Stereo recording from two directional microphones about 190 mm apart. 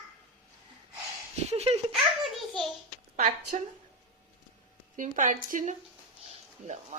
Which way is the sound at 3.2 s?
35° right (ahead or behind).